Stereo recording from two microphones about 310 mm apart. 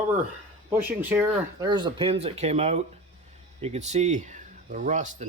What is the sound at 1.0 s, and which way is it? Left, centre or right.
Speech, centre.